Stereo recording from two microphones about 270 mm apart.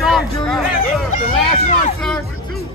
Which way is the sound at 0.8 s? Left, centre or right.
Left.